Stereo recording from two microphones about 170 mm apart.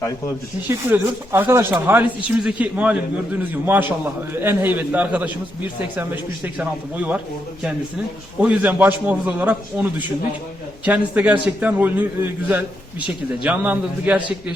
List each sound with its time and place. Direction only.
0.7 s a man's voice: 15° right (ahead or behind)
8.4 s a man's voice: 10° right (ahead or behind)